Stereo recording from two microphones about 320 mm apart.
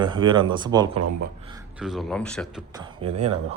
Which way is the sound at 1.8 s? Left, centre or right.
Centre.